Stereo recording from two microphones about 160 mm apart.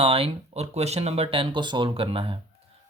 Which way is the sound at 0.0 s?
35° right (ahead or behind).